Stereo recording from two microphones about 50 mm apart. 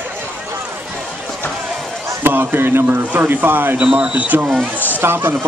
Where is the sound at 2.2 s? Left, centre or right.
Right.